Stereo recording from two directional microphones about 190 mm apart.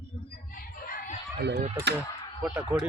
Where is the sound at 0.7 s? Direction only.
50° left (ahead or behind).